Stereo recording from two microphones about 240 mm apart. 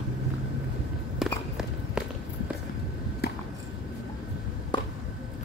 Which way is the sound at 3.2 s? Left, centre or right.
Left.